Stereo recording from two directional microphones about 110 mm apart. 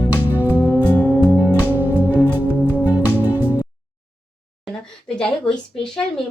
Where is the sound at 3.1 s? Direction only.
15° right (ahead or behind).